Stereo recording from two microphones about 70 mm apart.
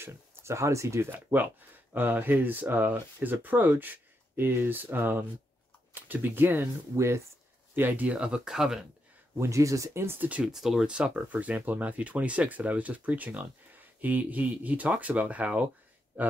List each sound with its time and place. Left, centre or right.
0.0 s speech: right
2.0 s speech: right
7.7 s speech: right; by 8.8 s centre
9.4 s speech: right
10.0 s speech: right
10.4 s speech: centre; by 16.3 s right